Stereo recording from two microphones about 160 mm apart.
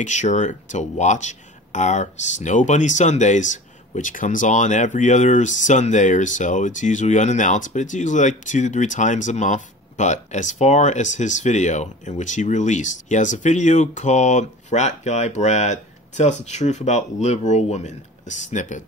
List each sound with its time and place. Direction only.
0.0 s speech: 50° left (ahead or behind)